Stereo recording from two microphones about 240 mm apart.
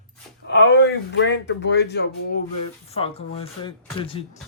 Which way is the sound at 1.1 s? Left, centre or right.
Left.